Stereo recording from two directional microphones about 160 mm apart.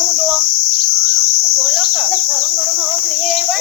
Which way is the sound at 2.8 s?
5° left (ahead or behind).